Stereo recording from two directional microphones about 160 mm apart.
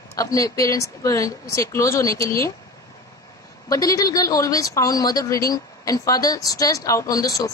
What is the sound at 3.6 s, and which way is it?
A woman's voice, 20° left (ahead or behind).